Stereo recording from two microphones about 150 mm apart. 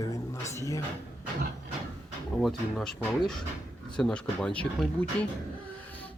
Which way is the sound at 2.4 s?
Centre (ahead or behind).